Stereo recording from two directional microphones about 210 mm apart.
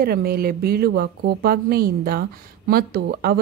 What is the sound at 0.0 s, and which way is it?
Speech, 45° right (ahead or behind).